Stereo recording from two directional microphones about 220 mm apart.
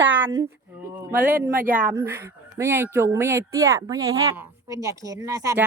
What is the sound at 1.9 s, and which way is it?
A woman's voice, 10° right (ahead or behind).